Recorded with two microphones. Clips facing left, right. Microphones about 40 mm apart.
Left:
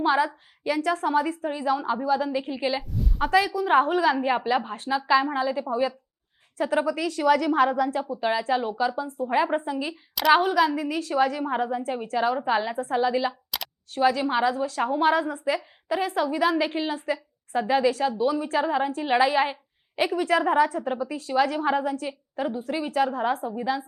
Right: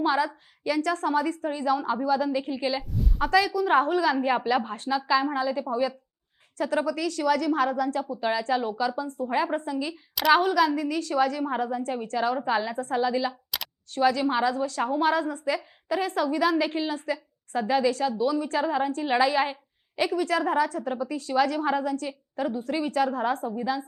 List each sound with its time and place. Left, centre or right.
0.0 s a woman's voice: centre
2.8 s a sound: centre
3.2 s a woman's voice: centre
9.3 s a woman's voice: centre
10.2 s a woman's voice: centre
13.5 s a sound: centre
14.0 s a woman's voice: centre